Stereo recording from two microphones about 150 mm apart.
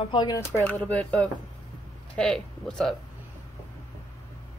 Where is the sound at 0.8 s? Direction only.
10° left (ahead or behind).